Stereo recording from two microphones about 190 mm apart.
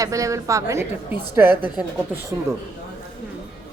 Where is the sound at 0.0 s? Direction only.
15° right (ahead or behind).